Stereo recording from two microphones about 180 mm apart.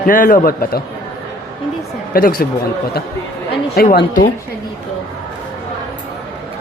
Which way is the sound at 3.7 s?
60° left (ahead or behind).